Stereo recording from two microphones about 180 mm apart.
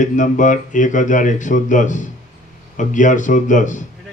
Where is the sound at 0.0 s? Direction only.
45° left (ahead or behind).